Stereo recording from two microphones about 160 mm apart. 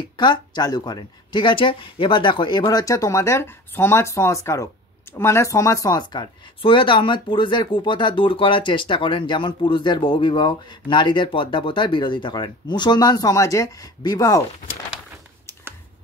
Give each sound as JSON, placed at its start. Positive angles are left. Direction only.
{"t": 0.2, "sound": "speech", "side_deg": 25}